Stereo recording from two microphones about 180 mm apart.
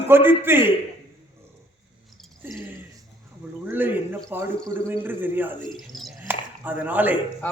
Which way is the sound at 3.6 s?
10° right (ahead or behind).